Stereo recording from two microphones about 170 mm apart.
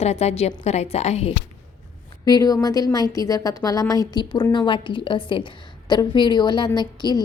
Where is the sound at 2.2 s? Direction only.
25° left (ahead or behind).